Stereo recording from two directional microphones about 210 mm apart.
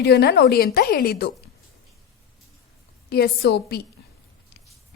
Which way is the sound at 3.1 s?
50° left (ahead or behind).